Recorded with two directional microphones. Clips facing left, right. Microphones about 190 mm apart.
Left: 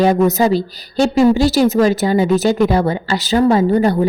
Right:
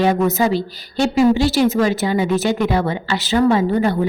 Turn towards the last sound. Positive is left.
turn(degrees=40)  # may be behind; listen again after turning